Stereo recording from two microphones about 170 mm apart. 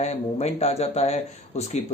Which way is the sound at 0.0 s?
40° left (ahead or behind).